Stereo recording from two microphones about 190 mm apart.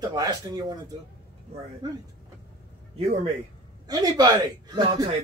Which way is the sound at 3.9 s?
20° right (ahead or behind).